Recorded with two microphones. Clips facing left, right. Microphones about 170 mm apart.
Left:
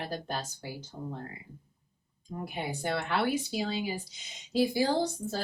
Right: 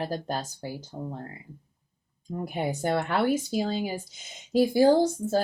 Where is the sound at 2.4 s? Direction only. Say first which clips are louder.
Right 6 dB; 45° right (ahead or behind).